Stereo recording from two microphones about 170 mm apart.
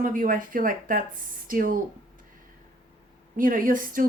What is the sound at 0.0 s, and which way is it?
A woman's voice, 55° right (ahead or behind).